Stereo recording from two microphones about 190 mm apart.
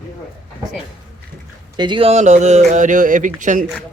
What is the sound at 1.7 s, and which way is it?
Speech, 25° right (ahead or behind).